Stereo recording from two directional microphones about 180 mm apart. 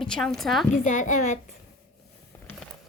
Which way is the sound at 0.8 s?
45° left (ahead or behind).